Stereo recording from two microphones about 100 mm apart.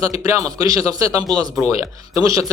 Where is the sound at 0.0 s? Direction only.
35° right (ahead or behind).